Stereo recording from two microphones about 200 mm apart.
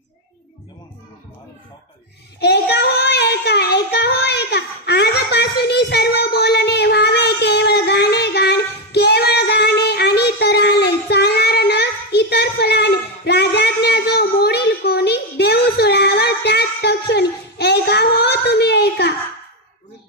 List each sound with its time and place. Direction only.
2.4 s child singing: 55° left (ahead or behind)